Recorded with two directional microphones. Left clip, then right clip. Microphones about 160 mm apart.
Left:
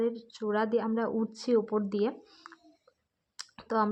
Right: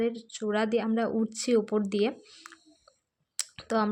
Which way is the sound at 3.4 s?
20° right (ahead or behind).